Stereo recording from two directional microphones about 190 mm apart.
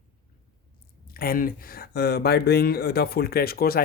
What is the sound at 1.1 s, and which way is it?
Speech, 50° left (ahead or behind).